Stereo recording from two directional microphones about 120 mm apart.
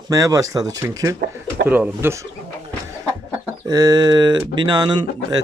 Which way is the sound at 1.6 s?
15° right (ahead or behind).